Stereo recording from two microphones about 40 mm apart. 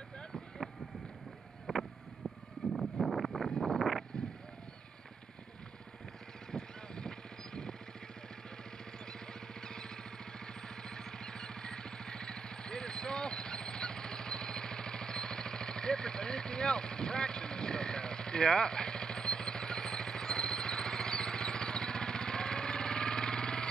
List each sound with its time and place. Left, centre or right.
1.7 s vehicle: centre
6.5 s horse: centre
9.0 s vehicle: centre